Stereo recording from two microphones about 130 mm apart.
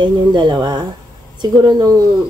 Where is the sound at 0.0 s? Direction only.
35° right (ahead or behind).